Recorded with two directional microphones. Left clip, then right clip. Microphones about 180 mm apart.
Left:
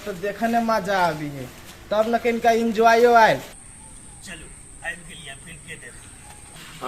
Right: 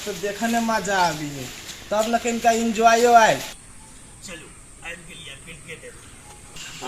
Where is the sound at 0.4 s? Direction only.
10° left (ahead or behind).